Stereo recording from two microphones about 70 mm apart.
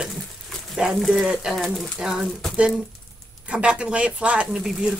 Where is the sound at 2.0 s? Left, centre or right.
Centre.